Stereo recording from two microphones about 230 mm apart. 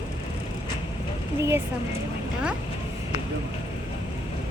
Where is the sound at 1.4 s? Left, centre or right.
Centre.